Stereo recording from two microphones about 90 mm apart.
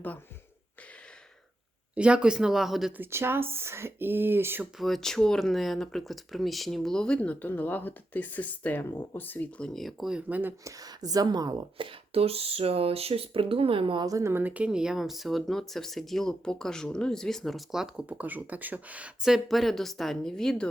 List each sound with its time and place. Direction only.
2.0 s speech: 10° right (ahead or behind)
3.0 s speech: 25° right (ahead or behind)
4.6 s speech: centre (ahead or behind); by 9.6 s 20° left (ahead or behind)
9.6 s speech: centre (ahead or behind)
10.2 s speech: 20° right (ahead or behind)
10.6 s speech: 40° right (ahead or behind)
11.8 s speech: 85° right
14.0 s speech: 35° right (ahead or behind); by 20.7 s 5° left (ahead or behind)